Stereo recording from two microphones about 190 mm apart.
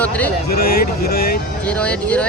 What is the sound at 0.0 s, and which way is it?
Speech, 5° left (ahead or behind).